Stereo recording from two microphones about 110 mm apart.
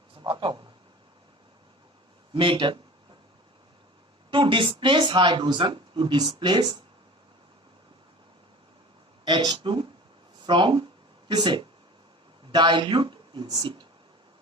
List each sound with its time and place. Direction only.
0.2 s a sound: 45° right (ahead or behind)
2.3 s speech: 50° right (ahead or behind)
4.3 s speech: 50° right (ahead or behind)
9.2 s speech: 40° right (ahead or behind)